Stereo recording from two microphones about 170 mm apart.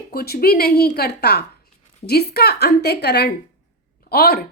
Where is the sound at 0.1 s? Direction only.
65° left (ahead or behind).